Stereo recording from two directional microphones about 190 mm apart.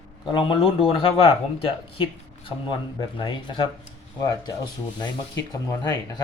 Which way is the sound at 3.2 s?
25° left (ahead or behind).